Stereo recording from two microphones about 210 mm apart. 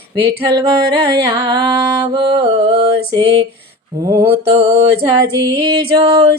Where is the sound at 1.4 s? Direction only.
25° right (ahead or behind).